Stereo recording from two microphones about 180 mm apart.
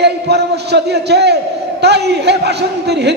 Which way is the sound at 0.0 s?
70° right (ahead or behind).